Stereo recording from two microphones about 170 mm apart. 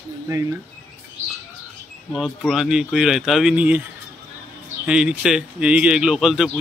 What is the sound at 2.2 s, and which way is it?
Speech, 5° right (ahead or behind).